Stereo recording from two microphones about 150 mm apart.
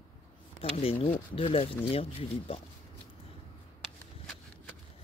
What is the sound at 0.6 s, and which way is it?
Speech, 40° left (ahead or behind).